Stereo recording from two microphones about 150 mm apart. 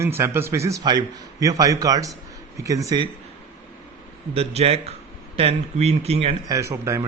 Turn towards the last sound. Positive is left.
turn(degrees=-20)  # may be behind; listen again after turning